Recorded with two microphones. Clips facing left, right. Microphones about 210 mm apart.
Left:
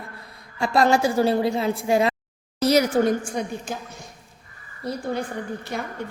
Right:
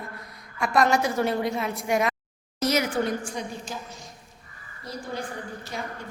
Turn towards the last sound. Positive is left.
turn(degrees=60)  # may be behind; listen again after turning